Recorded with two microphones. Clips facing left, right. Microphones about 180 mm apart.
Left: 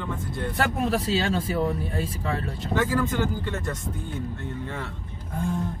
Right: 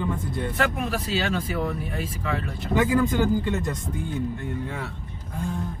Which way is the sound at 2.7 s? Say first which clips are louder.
Right 3 dB; 15° right (ahead or behind).